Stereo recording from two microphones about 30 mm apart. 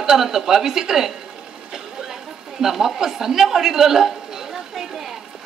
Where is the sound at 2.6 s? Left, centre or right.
Centre.